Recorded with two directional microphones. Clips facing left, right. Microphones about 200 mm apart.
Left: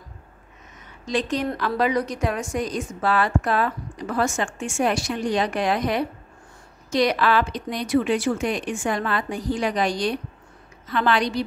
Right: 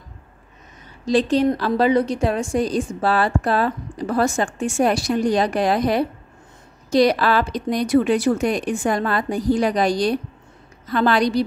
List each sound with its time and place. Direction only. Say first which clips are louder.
1.0 s a woman's voice: right 7 dB; 30° right (ahead or behind)